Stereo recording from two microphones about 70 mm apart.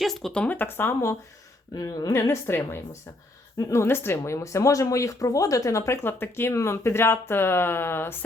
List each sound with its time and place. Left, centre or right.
0.0 s speech: centre
0.4 s speech: left
1.7 s speech: left
2.5 s speech: left
6.0 s speech: left